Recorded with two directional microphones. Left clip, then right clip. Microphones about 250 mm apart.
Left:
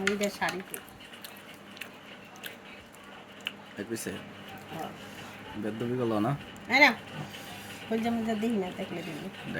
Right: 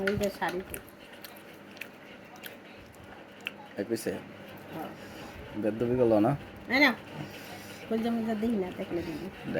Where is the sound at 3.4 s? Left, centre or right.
Centre.